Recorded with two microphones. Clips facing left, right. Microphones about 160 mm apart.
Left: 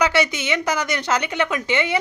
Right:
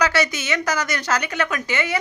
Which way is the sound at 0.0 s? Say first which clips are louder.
Left 1 dB; 25° left (ahead or behind).